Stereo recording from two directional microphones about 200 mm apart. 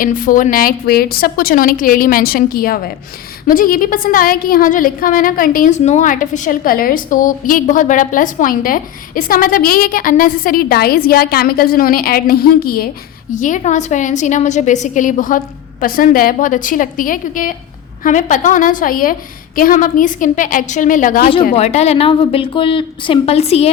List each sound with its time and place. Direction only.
0.0 s a woman's voice: 40° left (ahead or behind)